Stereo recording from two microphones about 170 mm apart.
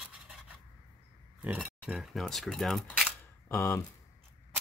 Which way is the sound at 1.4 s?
5° right (ahead or behind).